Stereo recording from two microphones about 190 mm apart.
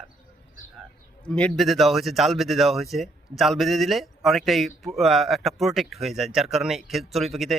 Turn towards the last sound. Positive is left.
turn(degrees=0)  # may be behind; listen again after turning